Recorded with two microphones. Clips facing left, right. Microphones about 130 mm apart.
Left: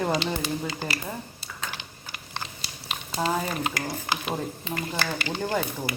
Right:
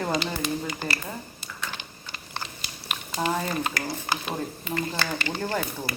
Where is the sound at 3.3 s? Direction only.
10° left (ahead or behind).